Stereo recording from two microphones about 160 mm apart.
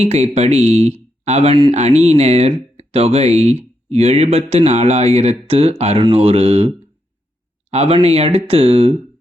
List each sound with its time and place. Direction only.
0.0 s speech: 40° right (ahead or behind)